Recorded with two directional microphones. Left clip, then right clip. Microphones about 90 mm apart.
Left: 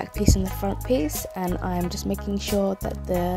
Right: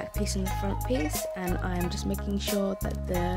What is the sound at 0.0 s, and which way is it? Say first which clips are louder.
Music: left 7 dB; 45° left (ahead or behind).